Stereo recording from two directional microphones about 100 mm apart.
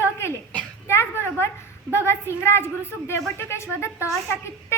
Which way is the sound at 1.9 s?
25° left (ahead or behind).